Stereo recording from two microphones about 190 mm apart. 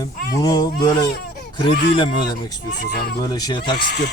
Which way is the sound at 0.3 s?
20° left (ahead or behind).